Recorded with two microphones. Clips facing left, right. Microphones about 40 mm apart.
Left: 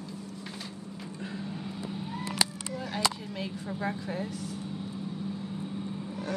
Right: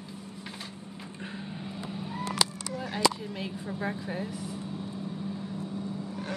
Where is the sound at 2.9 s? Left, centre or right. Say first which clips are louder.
Right 4 dB; centre.